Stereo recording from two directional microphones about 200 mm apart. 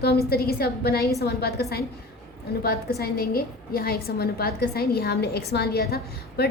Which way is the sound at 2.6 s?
50° left (ahead or behind).